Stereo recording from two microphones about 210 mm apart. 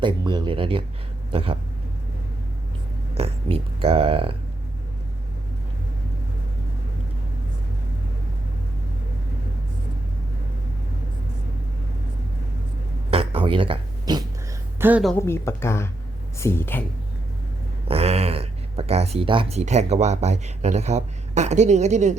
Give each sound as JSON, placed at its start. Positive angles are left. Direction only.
{"t": 0.0, "sound": "speech", "side_deg": -20}
{"t": 3.2, "sound": "speech", "side_deg": -25}
{"t": 13.1, "sound": "a sound", "side_deg": -25}
{"t": 14.8, "sound": "a woman's voice", "side_deg": -10}
{"t": 15.2, "sound": "speech", "side_deg": 10}
{"t": 17.8, "sound": "speech", "side_deg": -30}